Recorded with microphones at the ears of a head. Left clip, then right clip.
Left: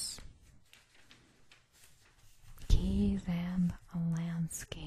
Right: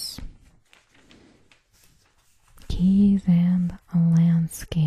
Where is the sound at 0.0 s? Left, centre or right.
Right.